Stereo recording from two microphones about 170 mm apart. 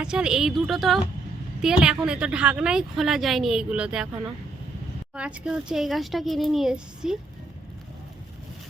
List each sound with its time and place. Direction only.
0.0 s a woman's voice: 5° right (ahead or behind)
5.1 s a woman's voice: 5° right (ahead or behind)